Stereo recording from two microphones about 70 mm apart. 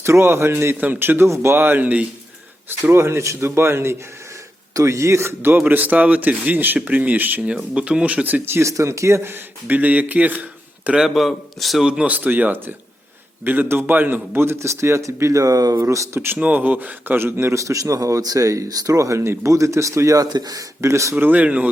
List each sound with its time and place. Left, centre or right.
0.0 s a man's voice: right
2.6 s a man's voice: right
4.7 s speech: right
7.5 s speech: centre
8.6 s speech: right
9.3 s speech: right
10.8 s a man's voice: centre
11.1 s a man's voice: centre
11.9 s a man's voice: centre; by 16.2 s right
16.4 s speech: right
20.3 s speech: right
20.8 s speech: right
21.2 s speech: right